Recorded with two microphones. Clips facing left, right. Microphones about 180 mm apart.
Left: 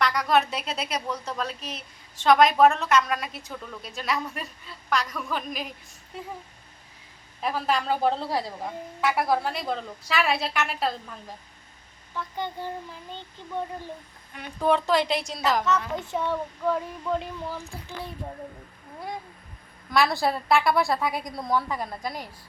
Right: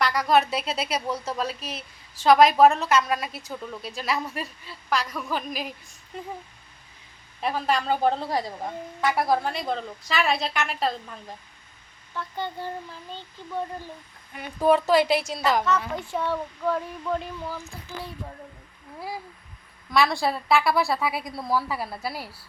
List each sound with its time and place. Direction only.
0.0 s a woman's voice: 5° right (ahead or behind)
7.4 s a woman's voice: centre (ahead or behind)
12.1 s child singing: 15° left (ahead or behind)
14.3 s a woman's voice: 5° right (ahead or behind)
16.0 s child singing: 20° left (ahead or behind)
18.9 s a woman's voice: 5° right (ahead or behind)